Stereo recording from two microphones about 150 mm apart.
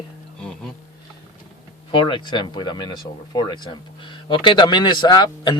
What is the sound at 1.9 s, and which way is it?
Speech, 30° left (ahead or behind).